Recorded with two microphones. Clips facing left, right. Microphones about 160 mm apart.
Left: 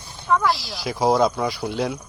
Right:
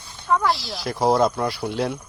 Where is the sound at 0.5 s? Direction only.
Centre (ahead or behind).